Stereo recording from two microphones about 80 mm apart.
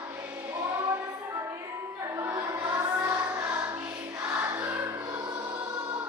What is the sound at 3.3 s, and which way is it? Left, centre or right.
Music, right.